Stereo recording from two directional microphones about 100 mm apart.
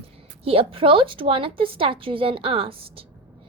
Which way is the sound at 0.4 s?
65° right (ahead or behind).